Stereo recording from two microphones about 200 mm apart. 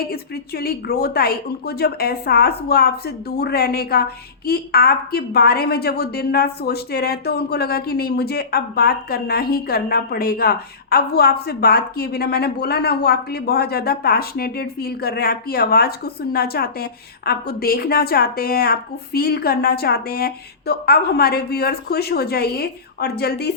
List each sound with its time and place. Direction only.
0.1 s a woman's voice: 50° left (ahead or behind)